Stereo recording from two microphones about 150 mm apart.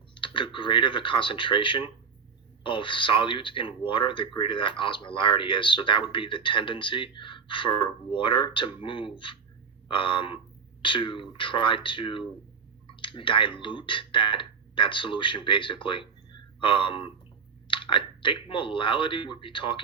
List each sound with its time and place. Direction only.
0.1 s speech: 35° left (ahead or behind)